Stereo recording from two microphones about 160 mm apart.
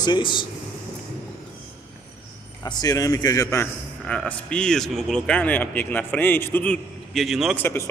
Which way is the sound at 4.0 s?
5° left (ahead or behind).